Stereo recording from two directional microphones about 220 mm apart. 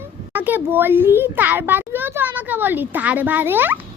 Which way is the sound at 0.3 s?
10° right (ahead or behind).